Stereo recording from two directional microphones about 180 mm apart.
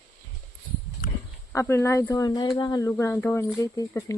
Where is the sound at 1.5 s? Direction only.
15° left (ahead or behind).